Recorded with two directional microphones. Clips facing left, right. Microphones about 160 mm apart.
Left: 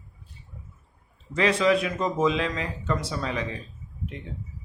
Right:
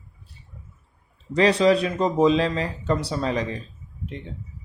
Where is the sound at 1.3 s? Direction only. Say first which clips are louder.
Right 4 dB; 35° right (ahead or behind).